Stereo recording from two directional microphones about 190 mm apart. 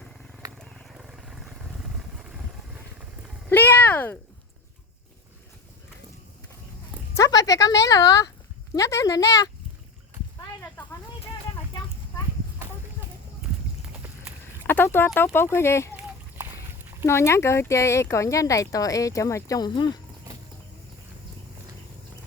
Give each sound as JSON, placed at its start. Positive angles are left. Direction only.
{"t": 0.6, "sound": "vehicle", "side_deg": 0}
{"t": 3.5, "sound": "a sound", "side_deg": 10}
{"t": 7.2, "sound": "a woman's voice", "side_deg": 20}
{"t": 14.7, "sound": "speech", "side_deg": 10}
{"t": 17.1, "sound": "speech", "side_deg": 15}